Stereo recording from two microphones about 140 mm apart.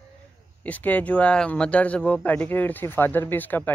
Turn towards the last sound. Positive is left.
turn(degrees=15)  # may be behind; listen again after turning